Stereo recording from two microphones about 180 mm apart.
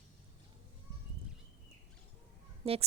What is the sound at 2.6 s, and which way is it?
Speech, 35° right (ahead or behind).